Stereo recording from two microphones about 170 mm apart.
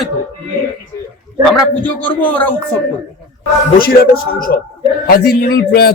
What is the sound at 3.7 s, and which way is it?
A man's voice, 60° left (ahead or behind).